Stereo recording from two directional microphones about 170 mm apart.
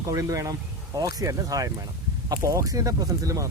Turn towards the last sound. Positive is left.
turn(degrees=-20)  # may be behind; listen again after turning